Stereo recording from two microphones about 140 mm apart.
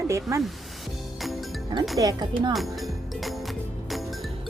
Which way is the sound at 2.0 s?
30° right (ahead or behind).